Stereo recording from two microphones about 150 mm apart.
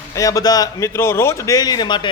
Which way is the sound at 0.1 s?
25° left (ahead or behind).